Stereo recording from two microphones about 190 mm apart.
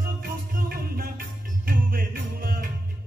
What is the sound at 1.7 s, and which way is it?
Music, 50° right (ahead or behind).